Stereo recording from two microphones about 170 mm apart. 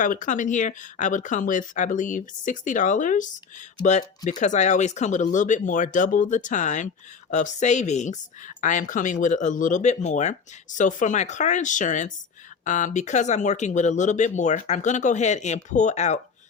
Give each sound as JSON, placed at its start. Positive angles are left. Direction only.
{"t": 0.0, "sound": "speech", "side_deg": 50}
{"t": 4.3, "sound": "speech", "side_deg": 45}